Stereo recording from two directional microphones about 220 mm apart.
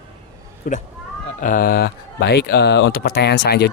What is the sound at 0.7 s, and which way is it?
Speech, 40° left (ahead or behind).